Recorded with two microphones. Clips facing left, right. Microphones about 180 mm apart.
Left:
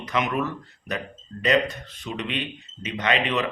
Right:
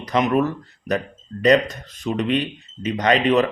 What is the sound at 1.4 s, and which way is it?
Speech, 40° right (ahead or behind).